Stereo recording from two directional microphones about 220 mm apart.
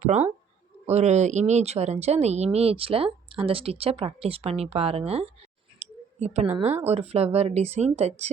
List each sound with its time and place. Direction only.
0.0 s speech: 30° right (ahead or behind)